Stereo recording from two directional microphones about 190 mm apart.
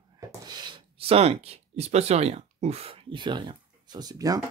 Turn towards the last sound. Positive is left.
turn(degrees=-20)  # may be behind; listen again after turning